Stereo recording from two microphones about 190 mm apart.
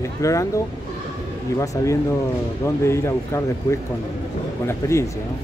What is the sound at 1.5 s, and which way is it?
Speech, 15° left (ahead or behind).